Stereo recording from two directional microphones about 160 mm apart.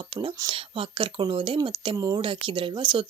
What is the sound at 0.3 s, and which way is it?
A woman's voice, 30° right (ahead or behind).